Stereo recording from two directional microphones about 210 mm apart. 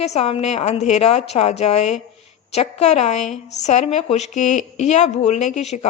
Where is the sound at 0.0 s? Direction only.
30° left (ahead or behind).